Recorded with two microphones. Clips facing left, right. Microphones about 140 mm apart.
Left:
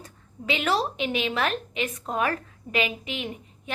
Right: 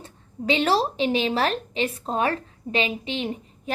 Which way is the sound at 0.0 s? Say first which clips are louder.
Right 6 dB; 30° right (ahead or behind).